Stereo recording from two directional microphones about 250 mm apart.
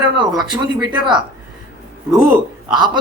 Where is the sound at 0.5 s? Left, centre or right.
Centre.